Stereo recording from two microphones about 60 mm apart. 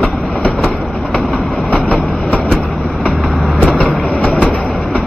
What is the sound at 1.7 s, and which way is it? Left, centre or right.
Train, centre.